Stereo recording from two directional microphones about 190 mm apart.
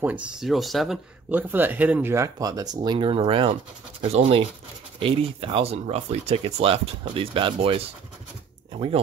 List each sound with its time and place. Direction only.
0.0 s speech: 5° right (ahead or behind); by 9.0 s 30° right (ahead or behind)